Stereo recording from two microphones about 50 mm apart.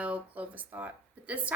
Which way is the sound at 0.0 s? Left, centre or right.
Right.